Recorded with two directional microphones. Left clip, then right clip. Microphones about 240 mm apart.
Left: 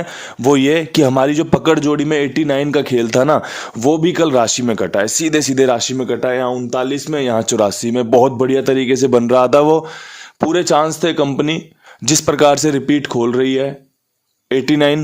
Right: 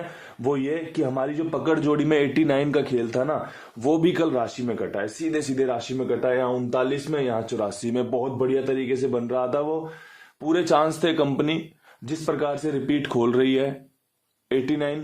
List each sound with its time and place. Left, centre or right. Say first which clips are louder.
0.4 s a man's voice: left 13 dB; left
3.8 s speech: left 8 dB; left
4.3 s speech: left 11 dB; left
5.4 s a man's voice: left 10 dB; left
5.6 s speech: left 10 dB; left
7.9 s a man's voice: left 13 dB; left
8.2 s speech: left 11 dB; left
10.5 s speech: left 6 dB; left
12.0 s speech: left 14 dB; left
12.9 s speech: left 7 dB; left
14.5 s a man's voice: left 11 dB; left